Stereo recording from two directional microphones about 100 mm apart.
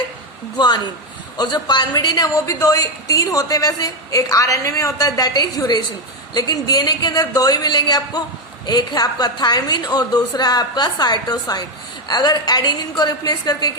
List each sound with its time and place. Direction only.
0.5 s a woman's voice: 45° left (ahead or behind)